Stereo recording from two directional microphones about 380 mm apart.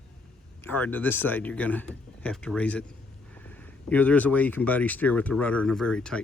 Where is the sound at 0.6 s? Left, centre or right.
Centre.